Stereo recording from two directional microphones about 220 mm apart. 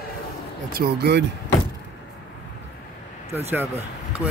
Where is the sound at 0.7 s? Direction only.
45° right (ahead or behind).